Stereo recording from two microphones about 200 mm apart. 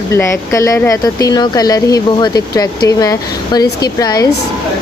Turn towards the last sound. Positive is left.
turn(degrees=20)  # may be behind; listen again after turning